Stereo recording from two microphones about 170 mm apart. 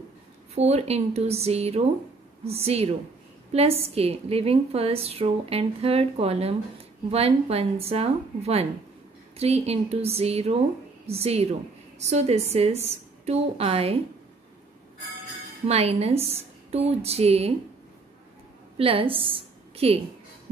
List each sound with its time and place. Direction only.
0.6 s a woman's voice: 40° right (ahead or behind)
15.6 s a woman's voice: 35° right (ahead or behind)
18.8 s a woman's voice: 30° right (ahead or behind)